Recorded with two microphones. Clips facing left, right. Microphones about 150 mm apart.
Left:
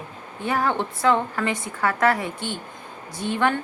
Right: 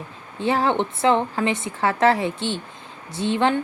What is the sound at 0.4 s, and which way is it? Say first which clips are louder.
Speech: right 3 dB; 25° right (ahead or behind).